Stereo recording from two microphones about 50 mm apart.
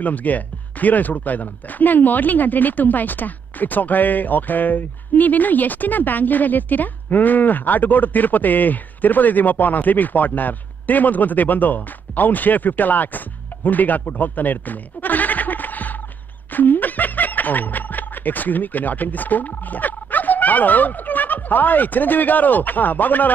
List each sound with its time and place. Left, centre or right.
0.0 s speech: left